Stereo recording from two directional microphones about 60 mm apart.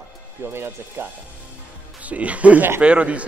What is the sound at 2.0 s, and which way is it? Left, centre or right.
Speech, right.